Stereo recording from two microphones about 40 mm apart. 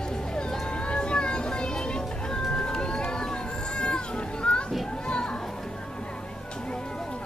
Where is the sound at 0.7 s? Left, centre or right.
Left.